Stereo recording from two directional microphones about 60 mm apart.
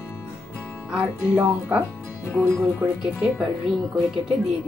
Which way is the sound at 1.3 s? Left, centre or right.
Right.